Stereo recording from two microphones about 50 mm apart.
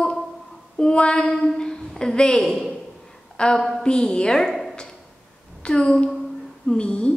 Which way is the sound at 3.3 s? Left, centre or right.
Centre.